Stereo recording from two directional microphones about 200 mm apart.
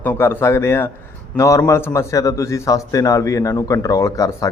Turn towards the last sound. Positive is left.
turn(degrees=15)  # may be behind; listen again after turning